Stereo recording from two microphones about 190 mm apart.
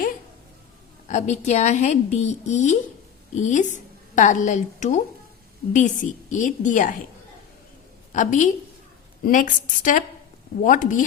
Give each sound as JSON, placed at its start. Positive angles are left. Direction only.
{"t": 1.0, "sound": "a woman's voice", "side_deg": 40}
{"t": 8.1, "sound": "a woman's voice", "side_deg": 40}